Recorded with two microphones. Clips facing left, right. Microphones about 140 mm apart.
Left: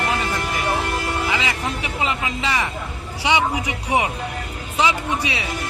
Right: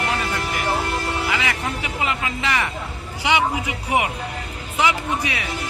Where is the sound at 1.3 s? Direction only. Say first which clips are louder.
Left 1 dB; 20° left (ahead or behind).